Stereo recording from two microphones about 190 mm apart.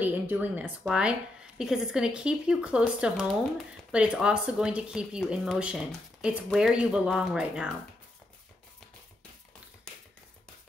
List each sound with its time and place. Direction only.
0.0 s speech: 10° right (ahead or behind)